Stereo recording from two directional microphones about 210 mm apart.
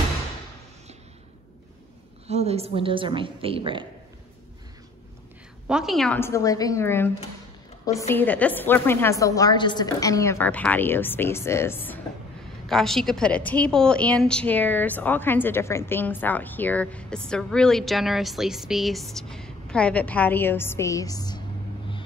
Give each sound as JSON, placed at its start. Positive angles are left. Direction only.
{"t": 2.2, "sound": "a woman's voice", "side_deg": -30}
{"t": 5.7, "sound": "a woman's voice", "side_deg": 0}
{"t": 8.1, "sound": "a woman's voice", "side_deg": 10}